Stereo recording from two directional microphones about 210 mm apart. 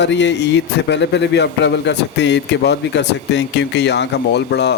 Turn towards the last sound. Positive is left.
turn(degrees=55)  # may be behind; listen again after turning